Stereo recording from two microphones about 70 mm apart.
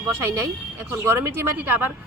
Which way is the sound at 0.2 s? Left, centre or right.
Right.